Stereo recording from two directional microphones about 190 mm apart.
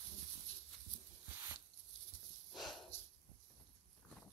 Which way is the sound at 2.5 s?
Centre (ahead or behind).